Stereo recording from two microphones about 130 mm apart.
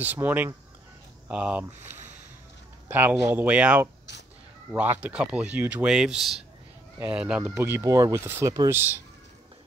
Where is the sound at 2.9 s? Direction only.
15° right (ahead or behind).